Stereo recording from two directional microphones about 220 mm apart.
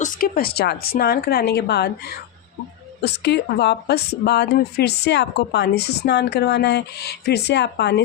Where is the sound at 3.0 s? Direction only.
50° left (ahead or behind).